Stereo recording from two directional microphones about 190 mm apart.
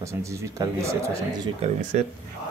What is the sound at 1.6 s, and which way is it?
Speech, 40° right (ahead or behind).